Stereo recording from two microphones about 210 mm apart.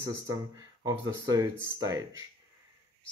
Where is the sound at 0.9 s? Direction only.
15° right (ahead or behind).